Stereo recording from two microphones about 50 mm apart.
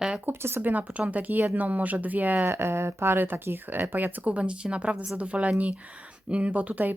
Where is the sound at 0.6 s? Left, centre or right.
Right.